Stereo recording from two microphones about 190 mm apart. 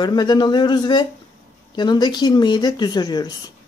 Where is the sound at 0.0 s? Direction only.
25° left (ahead or behind).